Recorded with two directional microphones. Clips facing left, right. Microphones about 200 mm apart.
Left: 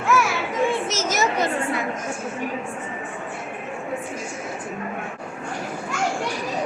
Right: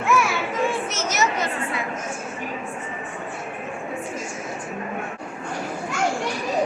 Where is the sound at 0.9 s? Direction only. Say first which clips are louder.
Left 2 dB; 90° left.